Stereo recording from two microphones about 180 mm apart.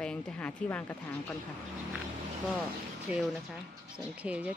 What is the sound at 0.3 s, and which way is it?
Speech, 5° left (ahead or behind).